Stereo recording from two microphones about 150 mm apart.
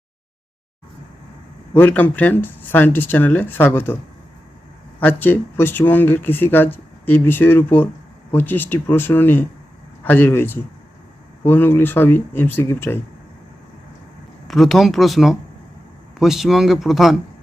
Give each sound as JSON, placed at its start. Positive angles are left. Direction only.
{"t": 1.7, "sound": "speech", "side_deg": 10}
{"t": 4.9, "sound": "speech", "side_deg": 10}
{"t": 14.4, "sound": "speech", "side_deg": 0}